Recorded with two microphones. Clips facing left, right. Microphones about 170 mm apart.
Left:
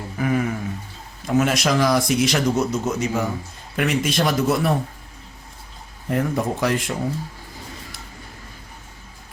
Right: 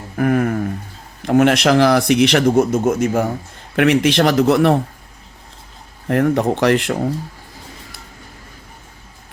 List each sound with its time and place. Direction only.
0.2 s a sound: 55° right (ahead or behind)
1.2 s speech: 65° right (ahead or behind)
3.8 s speech: 70° right (ahead or behind)
6.1 s speech: 75° right (ahead or behind)